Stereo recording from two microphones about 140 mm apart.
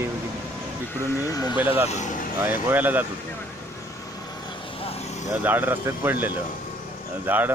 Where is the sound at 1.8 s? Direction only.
60° left (ahead or behind).